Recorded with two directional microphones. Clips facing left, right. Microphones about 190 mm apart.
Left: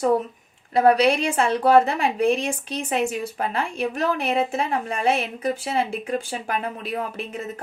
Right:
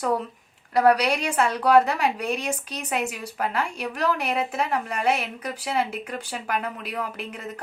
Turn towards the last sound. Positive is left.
turn(degrees=25)  # may be behind; listen again after turning